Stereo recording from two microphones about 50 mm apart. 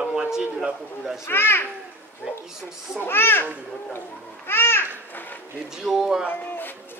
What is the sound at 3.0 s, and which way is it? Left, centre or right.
Speech, left.